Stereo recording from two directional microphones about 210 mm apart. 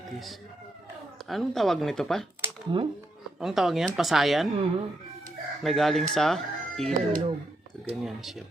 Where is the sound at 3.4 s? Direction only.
Centre (ahead or behind).